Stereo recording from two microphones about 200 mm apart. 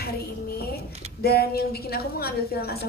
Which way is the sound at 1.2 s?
50° left (ahead or behind).